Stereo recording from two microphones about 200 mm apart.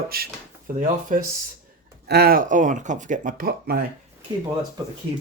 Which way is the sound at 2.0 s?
50° right (ahead or behind).